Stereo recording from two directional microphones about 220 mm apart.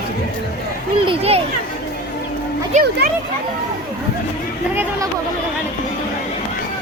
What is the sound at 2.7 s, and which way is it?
Speech, 45° right (ahead or behind).